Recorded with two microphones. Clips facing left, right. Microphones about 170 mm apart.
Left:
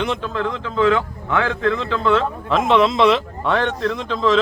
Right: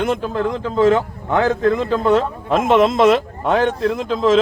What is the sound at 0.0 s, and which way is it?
A man's voice, 45° right (ahead or behind).